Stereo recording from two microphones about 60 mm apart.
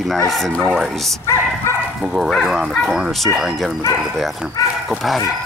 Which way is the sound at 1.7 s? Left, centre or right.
Left.